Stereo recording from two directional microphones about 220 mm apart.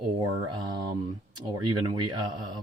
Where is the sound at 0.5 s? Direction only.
20° right (ahead or behind).